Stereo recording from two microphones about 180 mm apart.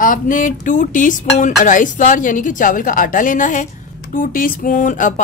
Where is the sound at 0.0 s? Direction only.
50° left (ahead or behind).